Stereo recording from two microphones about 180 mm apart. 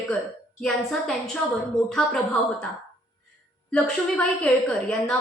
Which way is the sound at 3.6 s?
5° left (ahead or behind).